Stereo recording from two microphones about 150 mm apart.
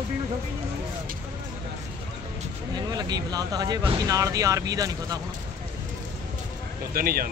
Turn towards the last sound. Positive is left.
turn(degrees=-75)  # may be behind; listen again after turning